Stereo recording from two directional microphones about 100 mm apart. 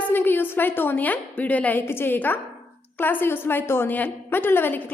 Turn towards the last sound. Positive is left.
turn(degrees=20)  # may be behind; listen again after turning